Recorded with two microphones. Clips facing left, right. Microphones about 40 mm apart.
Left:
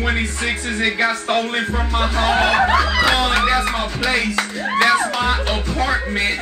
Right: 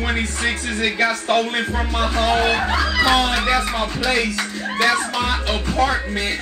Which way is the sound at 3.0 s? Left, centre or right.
Centre.